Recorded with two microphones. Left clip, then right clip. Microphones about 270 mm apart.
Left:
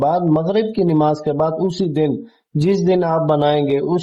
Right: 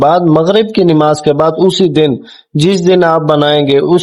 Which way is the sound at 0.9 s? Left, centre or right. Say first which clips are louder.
Right 8 dB; right.